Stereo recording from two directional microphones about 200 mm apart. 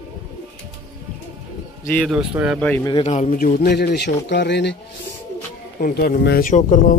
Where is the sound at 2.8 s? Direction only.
30° left (ahead or behind); by 4.8 s 60° left (ahead or behind).